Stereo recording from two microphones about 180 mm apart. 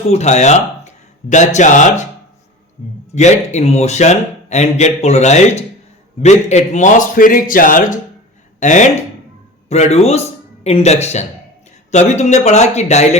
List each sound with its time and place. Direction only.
0.1 s speech: 40° left (ahead or behind)
3.2 s a man's voice: 40° left (ahead or behind)